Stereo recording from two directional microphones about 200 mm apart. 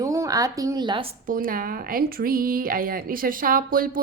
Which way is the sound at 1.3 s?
45° right (ahead or behind).